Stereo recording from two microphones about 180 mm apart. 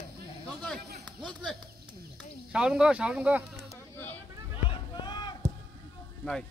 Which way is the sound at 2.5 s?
5° right (ahead or behind).